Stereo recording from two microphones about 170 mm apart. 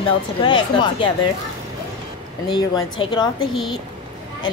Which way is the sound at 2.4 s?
25° left (ahead or behind).